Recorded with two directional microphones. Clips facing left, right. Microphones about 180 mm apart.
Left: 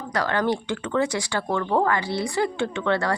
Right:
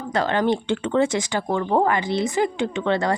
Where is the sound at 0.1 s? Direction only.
20° right (ahead or behind).